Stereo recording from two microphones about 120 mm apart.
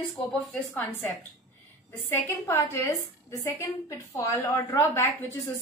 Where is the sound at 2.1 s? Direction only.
25° left (ahead or behind).